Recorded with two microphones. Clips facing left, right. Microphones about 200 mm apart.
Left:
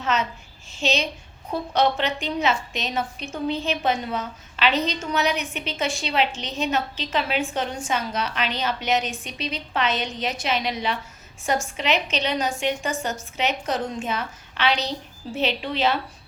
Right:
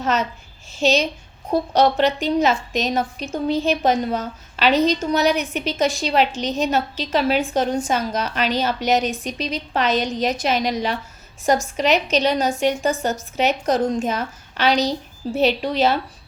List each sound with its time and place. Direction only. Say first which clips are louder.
0.0 s a child's voice: right 3 dB; 40° right (ahead or behind)